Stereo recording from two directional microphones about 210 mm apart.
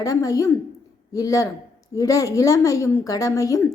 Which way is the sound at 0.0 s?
15° left (ahead or behind).